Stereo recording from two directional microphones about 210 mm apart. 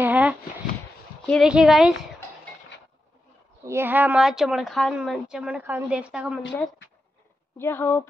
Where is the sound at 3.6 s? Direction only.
10° right (ahead or behind).